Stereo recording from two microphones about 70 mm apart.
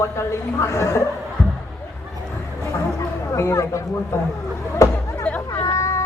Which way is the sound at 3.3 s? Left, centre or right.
Left.